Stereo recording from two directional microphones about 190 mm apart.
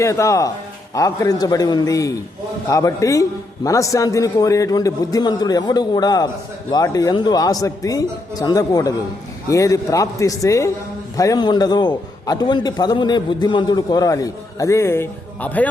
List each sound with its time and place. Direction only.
0.0 s a man's voice: 15° left (ahead or behind)